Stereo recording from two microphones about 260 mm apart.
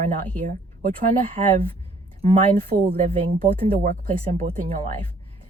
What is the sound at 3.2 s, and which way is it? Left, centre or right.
Speech, right.